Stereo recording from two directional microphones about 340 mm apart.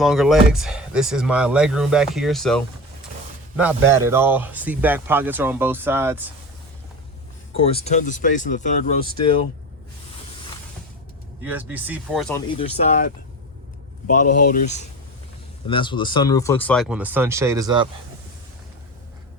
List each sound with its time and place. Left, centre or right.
0.0 s speech: centre
7.5 s speech: centre
11.4 s speech: centre
12.5 s speech: centre
14.3 s speech: left
14.5 s speech: left; by 17.8 s centre